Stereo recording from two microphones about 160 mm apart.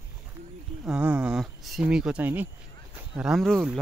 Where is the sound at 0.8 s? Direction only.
5° right (ahead or behind).